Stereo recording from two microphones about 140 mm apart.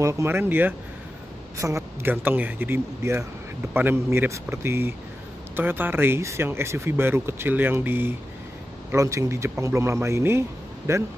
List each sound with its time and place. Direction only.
0.0 s speech: 20° right (ahead or behind)